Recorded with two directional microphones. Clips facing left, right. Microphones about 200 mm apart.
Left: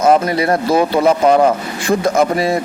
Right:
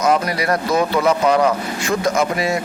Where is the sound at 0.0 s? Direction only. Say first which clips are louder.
Left 5 dB; 25° left (ahead or behind).